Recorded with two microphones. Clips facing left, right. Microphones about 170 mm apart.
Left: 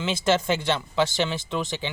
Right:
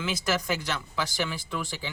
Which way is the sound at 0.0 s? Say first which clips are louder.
Left 6 dB; 25° left (ahead or behind).